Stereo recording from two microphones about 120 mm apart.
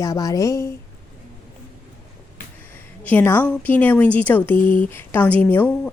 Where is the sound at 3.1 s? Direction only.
15° left (ahead or behind).